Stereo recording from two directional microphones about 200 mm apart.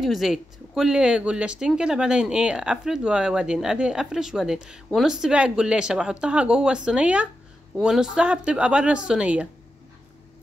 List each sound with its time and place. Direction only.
0.0 s speech: centre (ahead or behind)